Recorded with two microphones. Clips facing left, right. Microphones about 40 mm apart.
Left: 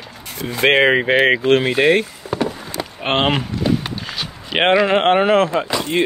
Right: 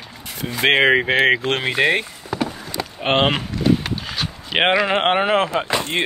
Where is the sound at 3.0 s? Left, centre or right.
Centre.